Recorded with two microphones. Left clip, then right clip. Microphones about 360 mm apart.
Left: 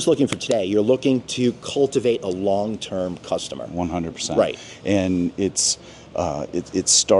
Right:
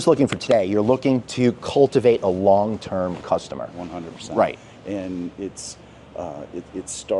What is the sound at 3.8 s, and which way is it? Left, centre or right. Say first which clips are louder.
Speech: left 7 dB; left.